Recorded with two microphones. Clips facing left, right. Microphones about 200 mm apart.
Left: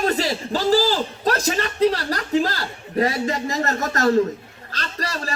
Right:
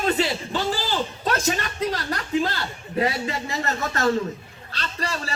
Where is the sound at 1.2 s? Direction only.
35° left (ahead or behind).